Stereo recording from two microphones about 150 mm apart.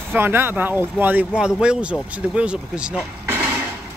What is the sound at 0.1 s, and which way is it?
Speech, 15° right (ahead or behind).